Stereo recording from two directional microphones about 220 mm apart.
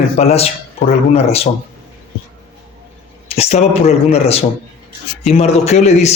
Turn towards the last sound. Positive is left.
turn(degrees=30)  # may be behind; listen again after turning